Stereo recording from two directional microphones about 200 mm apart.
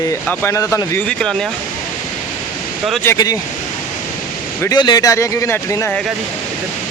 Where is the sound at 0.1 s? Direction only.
15° left (ahead or behind).